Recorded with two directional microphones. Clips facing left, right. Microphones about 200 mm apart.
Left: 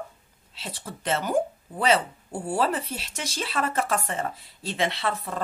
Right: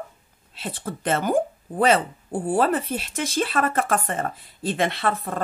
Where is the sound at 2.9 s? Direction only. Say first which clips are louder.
Right 8 dB; 50° right (ahead or behind).